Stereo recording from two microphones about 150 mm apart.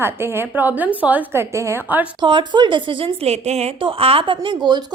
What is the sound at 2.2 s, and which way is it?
A woman's voice, 30° right (ahead or behind).